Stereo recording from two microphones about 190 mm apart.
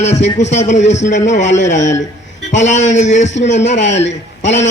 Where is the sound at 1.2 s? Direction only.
40° left (ahead or behind).